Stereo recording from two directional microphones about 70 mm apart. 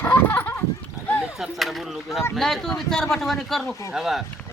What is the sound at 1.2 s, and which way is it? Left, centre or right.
Chop, centre.